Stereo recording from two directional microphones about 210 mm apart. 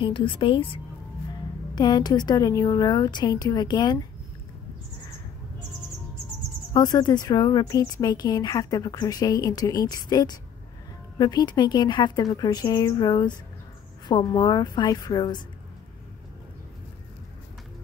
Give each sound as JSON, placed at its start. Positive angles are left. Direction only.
{"t": 0.0, "sound": "speech", "side_deg": 25}
{"t": 1.8, "sound": "speech", "side_deg": 20}
{"t": 6.7, "sound": "speech", "side_deg": 20}